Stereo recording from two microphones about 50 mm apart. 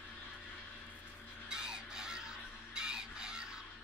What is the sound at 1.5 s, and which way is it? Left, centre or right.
Crow, centre.